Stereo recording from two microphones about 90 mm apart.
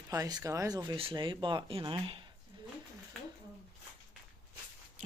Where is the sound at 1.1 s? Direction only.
65° right (ahead or behind).